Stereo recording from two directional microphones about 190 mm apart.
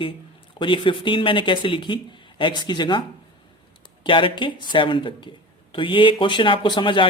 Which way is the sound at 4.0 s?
25° left (ahead or behind).